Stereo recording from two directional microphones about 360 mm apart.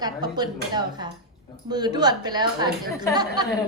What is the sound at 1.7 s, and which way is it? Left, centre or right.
A woman's voice, centre.